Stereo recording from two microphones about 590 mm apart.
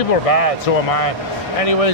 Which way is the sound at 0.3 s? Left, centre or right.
Left.